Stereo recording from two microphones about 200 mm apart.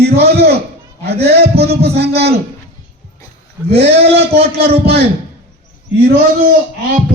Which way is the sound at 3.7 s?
30° right (ahead or behind).